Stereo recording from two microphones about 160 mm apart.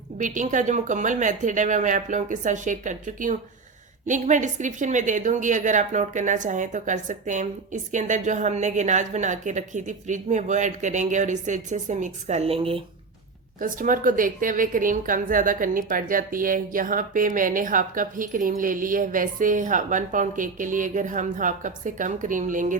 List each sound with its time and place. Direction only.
0.2 s a woman's voice: 55° right (ahead or behind); by 12.8 s 35° right (ahead or behind)
13.6 s a woman's voice: 55° right (ahead or behind)